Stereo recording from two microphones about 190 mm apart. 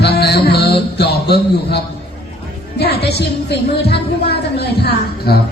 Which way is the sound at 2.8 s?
55° left (ahead or behind).